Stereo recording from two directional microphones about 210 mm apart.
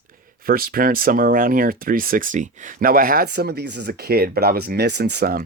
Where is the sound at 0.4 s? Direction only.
45° right (ahead or behind).